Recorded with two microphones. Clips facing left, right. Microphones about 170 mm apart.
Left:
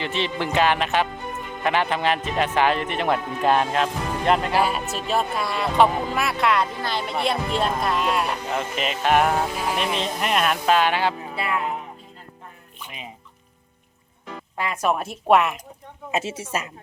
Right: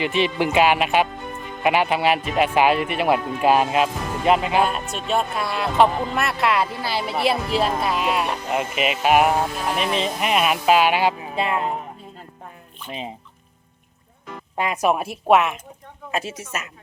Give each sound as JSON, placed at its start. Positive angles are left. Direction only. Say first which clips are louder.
{"t": 0.0, "sound": "speech", "louder": "right 5 dB", "side_deg": -15}
{"t": 9.6, "sound": "speech", "louder": "right 2 dB", "side_deg": 0}
{"t": 12.8, "sound": "speech", "louder": "right 6 dB", "side_deg": 10}
{"t": 14.5, "sound": "speech", "louder": "right 3 dB", "side_deg": -15}
{"t": 16.1, "sound": "a woman's voice", "louder": "left 2 dB", "side_deg": 25}